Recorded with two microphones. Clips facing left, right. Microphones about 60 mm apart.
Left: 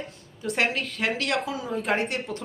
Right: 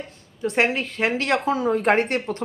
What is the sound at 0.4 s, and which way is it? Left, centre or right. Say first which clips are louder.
A woman's voice: right 5 dB; right.